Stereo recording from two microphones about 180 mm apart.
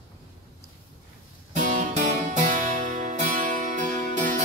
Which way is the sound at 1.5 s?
45° right (ahead or behind).